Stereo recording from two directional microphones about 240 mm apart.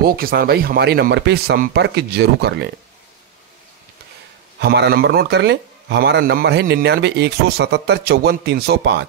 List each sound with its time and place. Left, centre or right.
0.0 s a man's voice: right
4.6 s a man's voice: right